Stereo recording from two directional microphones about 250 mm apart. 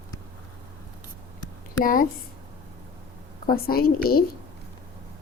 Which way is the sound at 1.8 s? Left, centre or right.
Left.